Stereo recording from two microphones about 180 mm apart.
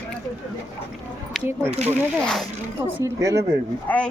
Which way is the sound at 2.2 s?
5° left (ahead or behind).